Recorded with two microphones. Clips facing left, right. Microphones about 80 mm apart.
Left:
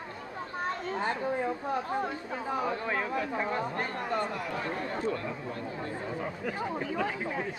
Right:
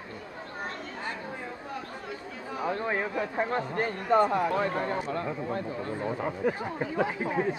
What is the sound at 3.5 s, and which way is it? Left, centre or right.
Speech, right.